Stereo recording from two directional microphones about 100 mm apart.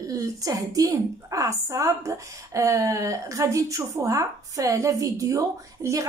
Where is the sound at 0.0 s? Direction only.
35° right (ahead or behind).